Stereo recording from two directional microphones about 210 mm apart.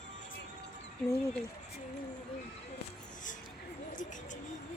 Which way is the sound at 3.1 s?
35° left (ahead or behind).